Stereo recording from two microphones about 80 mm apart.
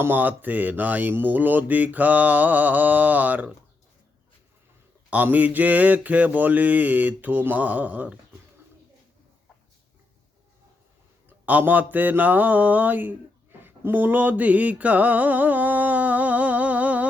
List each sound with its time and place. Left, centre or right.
0.0 s speech: right
5.1 s speech: right
11.3 s speech: right
13.6 s a sound: right